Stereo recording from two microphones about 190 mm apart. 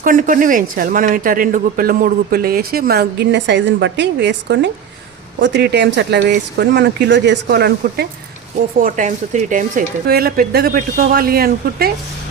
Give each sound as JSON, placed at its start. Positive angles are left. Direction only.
{"t": 0.0, "sound": "speech", "side_deg": -45}
{"t": 8.8, "sound": "speech", "side_deg": -40}